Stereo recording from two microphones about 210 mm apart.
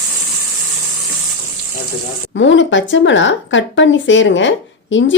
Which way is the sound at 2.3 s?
60° left (ahead or behind).